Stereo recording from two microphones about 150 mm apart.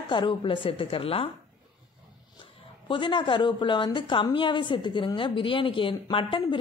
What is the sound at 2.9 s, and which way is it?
A woman's voice, 30° left (ahead or behind).